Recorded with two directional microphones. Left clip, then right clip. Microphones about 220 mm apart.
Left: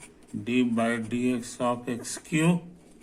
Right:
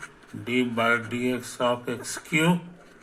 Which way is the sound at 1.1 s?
15° left (ahead or behind).